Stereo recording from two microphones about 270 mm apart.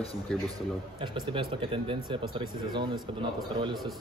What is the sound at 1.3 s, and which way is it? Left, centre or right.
Speech, centre.